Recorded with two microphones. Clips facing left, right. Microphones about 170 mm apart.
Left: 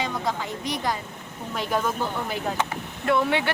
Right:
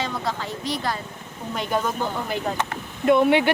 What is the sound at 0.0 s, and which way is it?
Speech, 15° left (ahead or behind).